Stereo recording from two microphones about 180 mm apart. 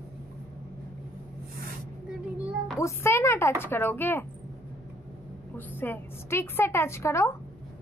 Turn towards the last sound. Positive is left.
turn(degrees=15)  # may be behind; listen again after turning